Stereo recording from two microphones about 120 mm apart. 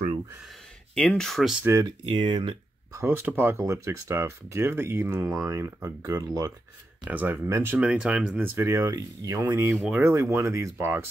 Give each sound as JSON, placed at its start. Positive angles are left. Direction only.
{"t": 0.9, "sound": "speech", "side_deg": 5}
{"t": 1.6, "sound": "speech", "side_deg": -25}
{"t": 1.9, "sound": "speech", "side_deg": -45}
{"t": 2.9, "sound": "speech", "side_deg": -20}
{"t": 7.1, "sound": "speech", "side_deg": -15}
{"t": 7.4, "sound": "speech", "side_deg": -25}
{"t": 7.7, "sound": "speech", "side_deg": -10}